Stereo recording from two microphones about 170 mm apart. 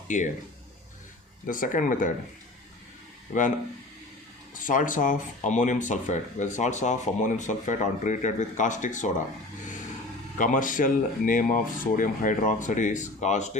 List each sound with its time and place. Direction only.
0.1 s speech: 45° left (ahead or behind)
1.5 s speech: 50° left (ahead or behind)
4.5 s speech: 50° left (ahead or behind)
10.3 s speech: 50° left (ahead or behind)